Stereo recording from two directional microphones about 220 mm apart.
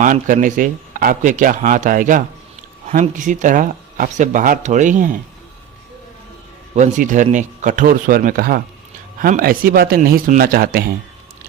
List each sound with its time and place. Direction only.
0.0 s speech: 35° right (ahead or behind)
6.7 s speech: 35° right (ahead or behind)